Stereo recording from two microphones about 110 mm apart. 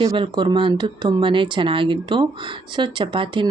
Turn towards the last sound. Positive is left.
turn(degrees=-50)  # may be behind; listen again after turning